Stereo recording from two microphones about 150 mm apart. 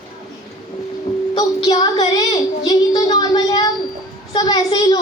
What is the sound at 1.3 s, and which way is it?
Child singing, 25° left (ahead or behind).